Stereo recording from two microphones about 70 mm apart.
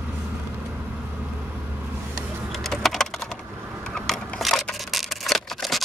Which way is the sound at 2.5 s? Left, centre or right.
Centre.